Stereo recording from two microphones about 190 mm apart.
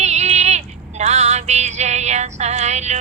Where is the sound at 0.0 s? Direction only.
35° right (ahead or behind).